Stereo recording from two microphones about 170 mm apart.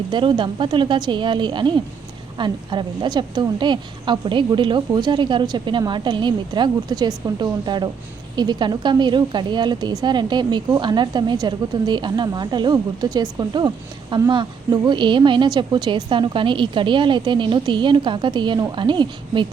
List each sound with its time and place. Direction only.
0.1 s a woman's voice: 25° right (ahead or behind)